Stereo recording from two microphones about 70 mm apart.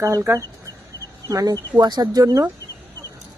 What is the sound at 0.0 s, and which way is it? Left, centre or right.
Speech, right.